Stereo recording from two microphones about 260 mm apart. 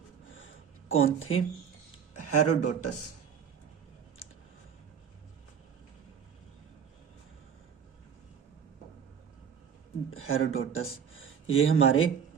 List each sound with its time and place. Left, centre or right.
0.3 s a sound: left
2.1 s speech: left
10.1 s speech: left